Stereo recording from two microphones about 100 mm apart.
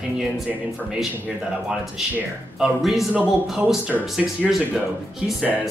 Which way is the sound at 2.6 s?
Centre (ahead or behind).